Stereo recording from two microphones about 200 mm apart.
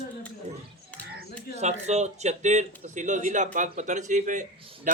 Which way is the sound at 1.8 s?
35° right (ahead or behind).